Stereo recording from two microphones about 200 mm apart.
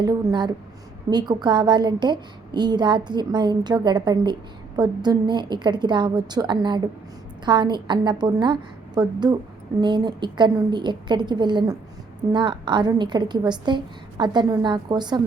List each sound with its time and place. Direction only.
0.0 s a woman's voice: 20° right (ahead or behind)